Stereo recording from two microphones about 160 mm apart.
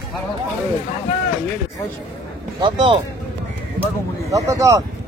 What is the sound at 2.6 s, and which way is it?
Speech, 30° right (ahead or behind).